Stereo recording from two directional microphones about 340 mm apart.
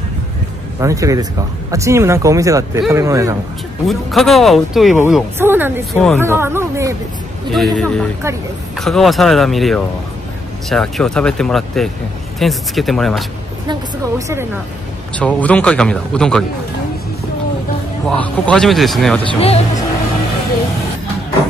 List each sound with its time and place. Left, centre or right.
0.7 s speech: centre
15.1 s speech: centre
18.0 s speech: centre
19.2 s speech: centre